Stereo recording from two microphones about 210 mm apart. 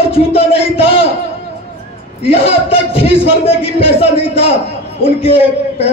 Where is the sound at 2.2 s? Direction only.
30° left (ahead or behind).